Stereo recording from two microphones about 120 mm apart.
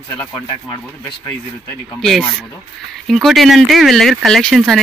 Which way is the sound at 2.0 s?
Centre (ahead or behind).